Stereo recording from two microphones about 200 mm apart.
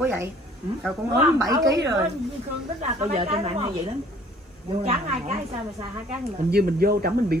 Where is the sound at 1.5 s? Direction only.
15° right (ahead or behind).